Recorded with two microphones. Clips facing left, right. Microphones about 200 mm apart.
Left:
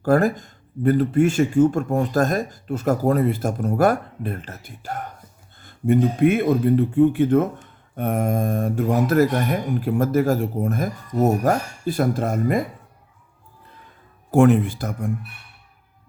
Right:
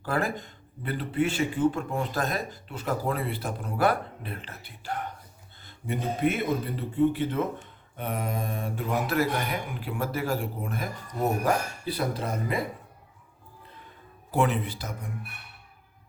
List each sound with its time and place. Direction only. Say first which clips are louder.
0.0 s speech: left 11 dB; 45° left (ahead or behind)
14.3 s speech: left 11 dB; 50° left (ahead or behind)